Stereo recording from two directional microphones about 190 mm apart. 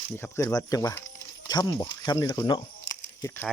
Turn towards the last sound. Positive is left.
turn(degrees=15)  # may be behind; listen again after turning